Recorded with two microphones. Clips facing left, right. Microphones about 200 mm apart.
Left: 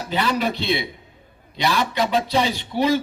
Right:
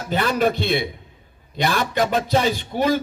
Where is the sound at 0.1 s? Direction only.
50° right (ahead or behind).